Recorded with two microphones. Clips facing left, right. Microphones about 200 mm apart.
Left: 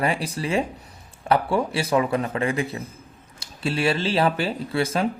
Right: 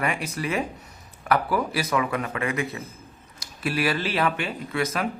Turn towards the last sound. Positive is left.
turn(degrees=30)  # may be behind; listen again after turning